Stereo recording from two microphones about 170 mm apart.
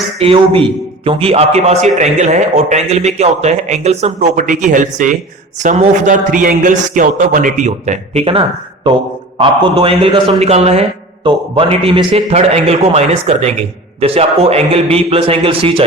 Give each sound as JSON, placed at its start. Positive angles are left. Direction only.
{"t": 0.2, "sound": "a man's voice", "side_deg": -30}